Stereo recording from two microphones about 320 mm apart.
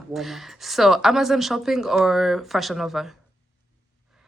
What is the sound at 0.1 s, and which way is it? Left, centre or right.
Speech, centre.